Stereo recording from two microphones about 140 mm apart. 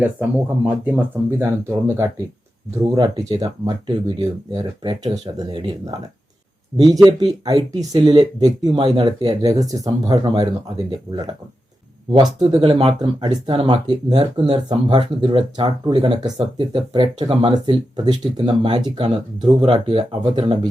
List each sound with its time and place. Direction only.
0.0 s speech: 10° right (ahead or behind)
2.8 s speech: 25° right (ahead or behind)
12.1 s speech: 30° right (ahead or behind)